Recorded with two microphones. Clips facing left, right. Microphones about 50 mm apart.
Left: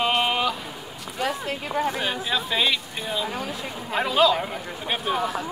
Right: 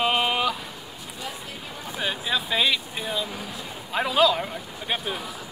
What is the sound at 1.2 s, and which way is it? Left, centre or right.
Speech, left.